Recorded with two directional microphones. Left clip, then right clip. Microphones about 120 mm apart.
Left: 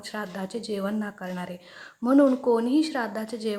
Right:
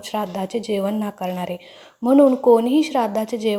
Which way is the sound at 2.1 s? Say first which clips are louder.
Right 7 dB; 15° right (ahead or behind).